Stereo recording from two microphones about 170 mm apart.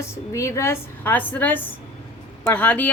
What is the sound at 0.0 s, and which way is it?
A woman's voice, 15° left (ahead or behind).